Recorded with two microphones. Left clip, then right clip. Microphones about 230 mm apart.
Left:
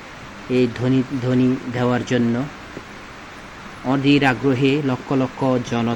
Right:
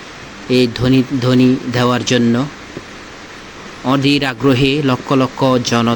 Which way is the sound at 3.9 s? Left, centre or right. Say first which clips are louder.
Right 2 dB; centre.